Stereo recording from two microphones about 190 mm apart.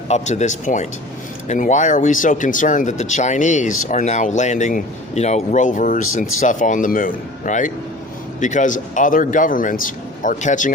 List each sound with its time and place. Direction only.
0.1 s a man's voice: 40° left (ahead or behind)